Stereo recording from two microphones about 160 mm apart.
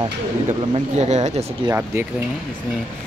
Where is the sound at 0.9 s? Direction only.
45° right (ahead or behind).